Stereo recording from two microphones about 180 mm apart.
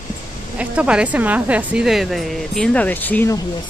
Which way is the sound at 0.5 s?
5° right (ahead or behind).